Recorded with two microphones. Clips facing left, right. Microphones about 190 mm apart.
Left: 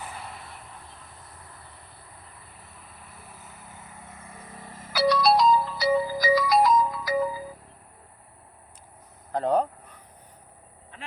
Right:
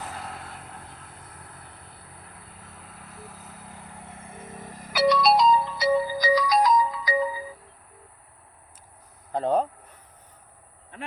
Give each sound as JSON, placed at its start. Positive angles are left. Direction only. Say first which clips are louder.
{"t": 4.3, "sound": "vehicle", "louder": "right 4 dB", "side_deg": -25}
{"t": 4.9, "sound": "music", "louder": "right 1 dB", "side_deg": 0}
{"t": 9.3, "sound": "speech", "louder": "even", "side_deg": 0}